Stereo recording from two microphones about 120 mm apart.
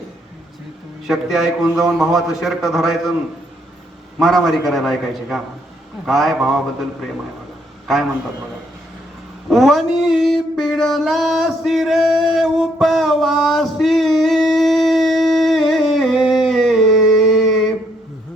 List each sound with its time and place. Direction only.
1.0 s a man's voice: 5° right (ahead or behind)
4.2 s a man's voice: centre (ahead or behind)
9.5 s a sound: centre (ahead or behind)